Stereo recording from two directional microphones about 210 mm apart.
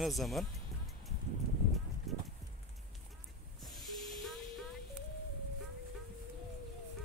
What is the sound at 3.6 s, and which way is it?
Hiss, centre (ahead or behind).